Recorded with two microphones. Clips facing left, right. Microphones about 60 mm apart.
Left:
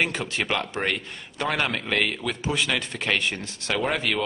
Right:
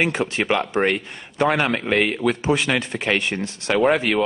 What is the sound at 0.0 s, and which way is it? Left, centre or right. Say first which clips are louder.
A man's voice: right 5 dB; centre.